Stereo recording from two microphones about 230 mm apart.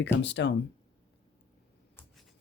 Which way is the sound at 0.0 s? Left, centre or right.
Left.